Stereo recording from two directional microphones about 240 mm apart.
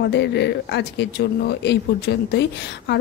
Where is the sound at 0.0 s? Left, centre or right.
Left.